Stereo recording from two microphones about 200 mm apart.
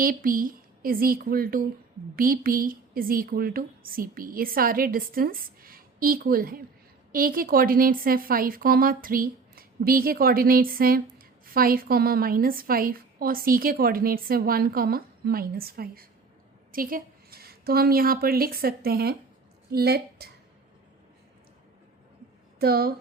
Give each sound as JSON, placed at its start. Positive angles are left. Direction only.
{"t": 0.0, "sound": "a woman's voice", "side_deg": -45}
{"t": 22.5, "sound": "speech", "side_deg": -50}